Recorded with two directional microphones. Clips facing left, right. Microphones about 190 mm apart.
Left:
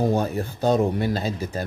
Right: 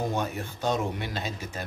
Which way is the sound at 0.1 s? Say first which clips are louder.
Left 7 dB; 35° left (ahead or behind).